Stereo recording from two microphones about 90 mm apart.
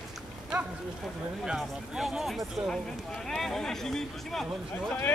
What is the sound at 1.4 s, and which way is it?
Speech, 5° right (ahead or behind).